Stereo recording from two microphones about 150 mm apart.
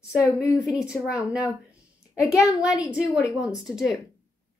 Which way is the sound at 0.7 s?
5° right (ahead or behind).